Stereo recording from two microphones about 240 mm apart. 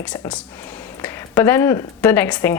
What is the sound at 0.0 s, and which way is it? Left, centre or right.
A woman's voice, centre.